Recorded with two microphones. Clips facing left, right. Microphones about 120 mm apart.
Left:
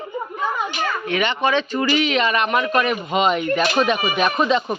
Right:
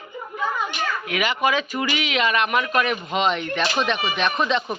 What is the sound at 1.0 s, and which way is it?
A child's voice, 5° right (ahead or behind).